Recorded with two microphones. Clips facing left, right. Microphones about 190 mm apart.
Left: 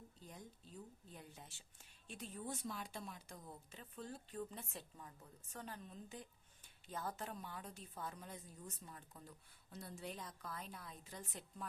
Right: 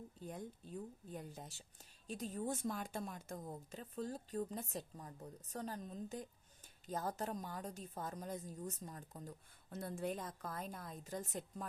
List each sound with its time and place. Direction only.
0.2 s a woman's voice: 55° right (ahead or behind)